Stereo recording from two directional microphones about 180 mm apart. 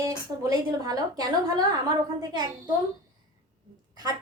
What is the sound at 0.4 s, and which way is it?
A woman's voice, 20° right (ahead or behind).